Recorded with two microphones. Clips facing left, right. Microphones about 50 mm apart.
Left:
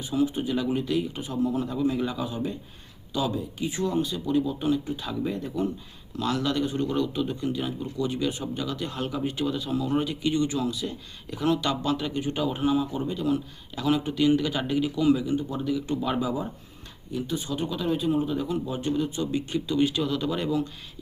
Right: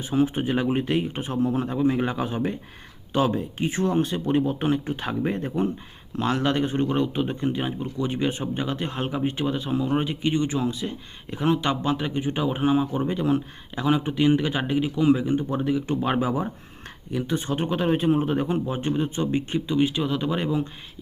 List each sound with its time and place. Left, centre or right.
0.0 s speech: right
13.8 s speech: right